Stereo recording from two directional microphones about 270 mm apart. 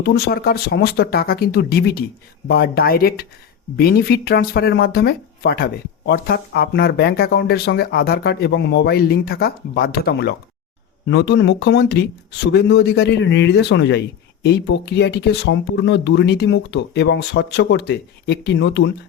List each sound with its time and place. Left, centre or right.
0.0 s speech: left